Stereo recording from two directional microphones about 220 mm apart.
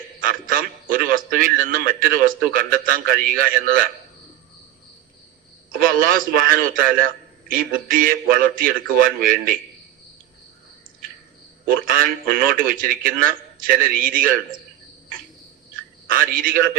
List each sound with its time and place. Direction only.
0.2 s a man's voice: 40° right (ahead or behind)
5.7 s a man's voice: 40° right (ahead or behind)
11.7 s a man's voice: 40° right (ahead or behind)
16.0 s a man's voice: 40° right (ahead or behind)